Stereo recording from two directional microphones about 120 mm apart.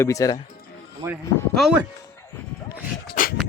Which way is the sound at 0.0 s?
25° left (ahead or behind).